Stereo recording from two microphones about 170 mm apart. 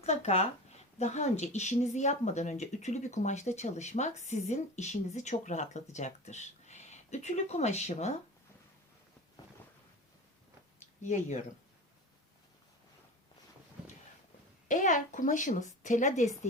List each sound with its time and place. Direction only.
0.0 s speech: 40° left (ahead or behind)
11.0 s speech: 45° left (ahead or behind)
14.7 s speech: 50° left (ahead or behind)